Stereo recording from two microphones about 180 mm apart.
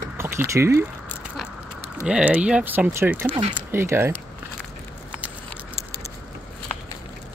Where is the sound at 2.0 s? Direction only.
5° right (ahead or behind).